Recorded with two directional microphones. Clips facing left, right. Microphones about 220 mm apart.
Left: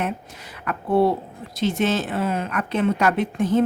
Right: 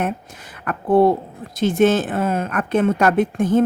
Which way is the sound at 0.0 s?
50° right (ahead or behind).